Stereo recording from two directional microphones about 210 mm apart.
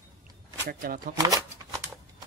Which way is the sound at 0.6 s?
45° right (ahead or behind).